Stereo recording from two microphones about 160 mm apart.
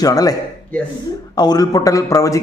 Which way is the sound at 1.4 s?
25° left (ahead or behind).